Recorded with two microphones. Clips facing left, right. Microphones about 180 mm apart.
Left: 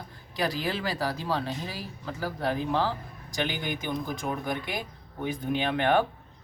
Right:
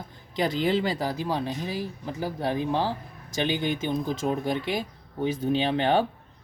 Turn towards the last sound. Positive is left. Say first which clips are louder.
# right 2 dB
turn(degrees=-25)  # may be behind; listen again after turning